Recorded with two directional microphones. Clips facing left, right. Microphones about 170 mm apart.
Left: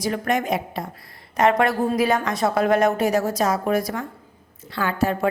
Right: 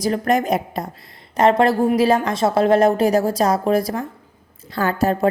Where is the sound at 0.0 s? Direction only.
35° right (ahead or behind).